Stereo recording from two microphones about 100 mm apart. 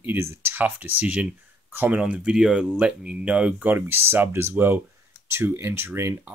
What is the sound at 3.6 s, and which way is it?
Speech, 20° right (ahead or behind).